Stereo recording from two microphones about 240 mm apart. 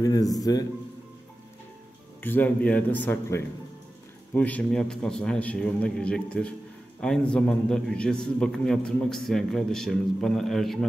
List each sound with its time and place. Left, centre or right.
0.0 s speech: centre
2.2 s a man's voice: centre